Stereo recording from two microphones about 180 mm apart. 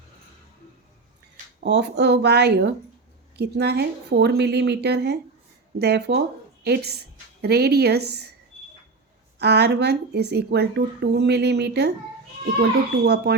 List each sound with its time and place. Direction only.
1.6 s a woman's voice: 70° right (ahead or behind)
9.4 s speech: 65° right (ahead or behind)